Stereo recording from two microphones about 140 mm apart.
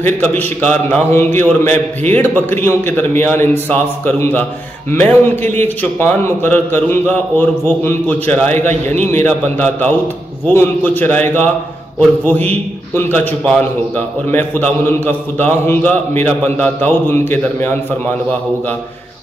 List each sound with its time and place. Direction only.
0.0 s a man's voice: 15° left (ahead or behind)
8.6 s a man's voice: 55° right (ahead or behind)
9.2 s a man's voice: 15° left (ahead or behind)